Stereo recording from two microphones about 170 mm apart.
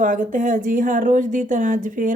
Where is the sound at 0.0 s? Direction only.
50° right (ahead or behind).